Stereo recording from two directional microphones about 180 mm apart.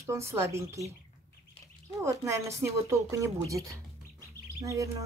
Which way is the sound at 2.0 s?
15° right (ahead or behind).